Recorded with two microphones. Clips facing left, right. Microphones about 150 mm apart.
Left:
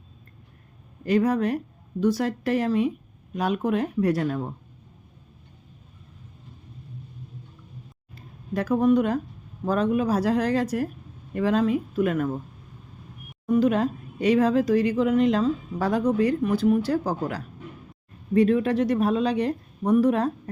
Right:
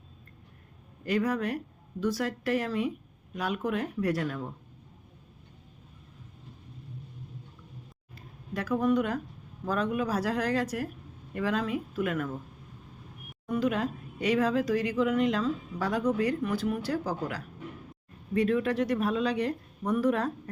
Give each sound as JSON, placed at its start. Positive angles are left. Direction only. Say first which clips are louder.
{"t": 1.0, "sound": "speech", "louder": "left 6 dB", "side_deg": 25}
{"t": 8.5, "sound": "speech", "louder": "left 6 dB", "side_deg": 30}
{"t": 13.5, "sound": "speech", "louder": "left 7 dB", "side_deg": 30}